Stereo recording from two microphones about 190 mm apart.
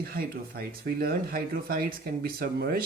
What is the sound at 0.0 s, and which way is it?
Speech, 50° right (ahead or behind).